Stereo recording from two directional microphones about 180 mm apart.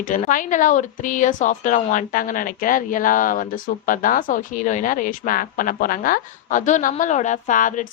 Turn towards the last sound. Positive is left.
turn(degrees=45)  # may be behind; listen again after turning